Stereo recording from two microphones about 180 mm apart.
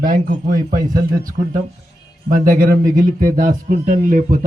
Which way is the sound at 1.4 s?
15° right (ahead or behind).